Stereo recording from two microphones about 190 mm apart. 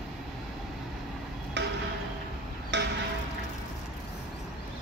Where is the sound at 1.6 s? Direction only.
65° right (ahead or behind).